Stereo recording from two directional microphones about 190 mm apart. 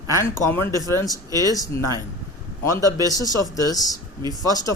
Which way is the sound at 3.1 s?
20° left (ahead or behind).